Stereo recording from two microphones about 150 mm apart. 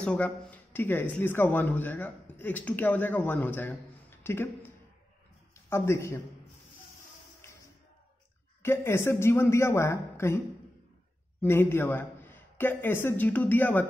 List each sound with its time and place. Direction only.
0.0 s speech: 10° left (ahead or behind)
8.6 s speech: 15° left (ahead or behind)
11.4 s speech: 15° left (ahead or behind)